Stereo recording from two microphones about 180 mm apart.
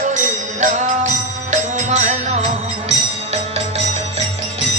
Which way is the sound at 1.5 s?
40° right (ahead or behind).